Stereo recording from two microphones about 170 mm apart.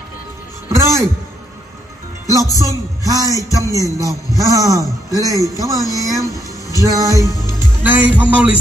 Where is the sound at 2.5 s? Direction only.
20° left (ahead or behind).